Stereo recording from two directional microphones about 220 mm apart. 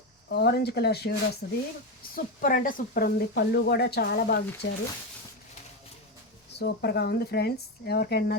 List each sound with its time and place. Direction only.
0.3 s speech: 50° left (ahead or behind)
6.6 s speech: 50° left (ahead or behind)